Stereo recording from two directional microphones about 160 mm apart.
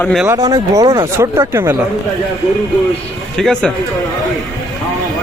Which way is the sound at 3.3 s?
5° left (ahead or behind).